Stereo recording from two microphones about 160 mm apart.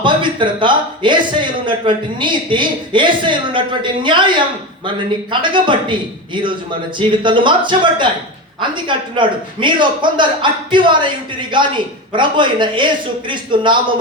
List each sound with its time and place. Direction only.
0.0 s a man's voice: 30° right (ahead or behind)
5.3 s a man's voice: 30° right (ahead or behind)